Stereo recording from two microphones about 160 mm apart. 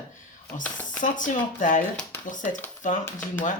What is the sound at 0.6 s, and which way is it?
Speech, 10° left (ahead or behind).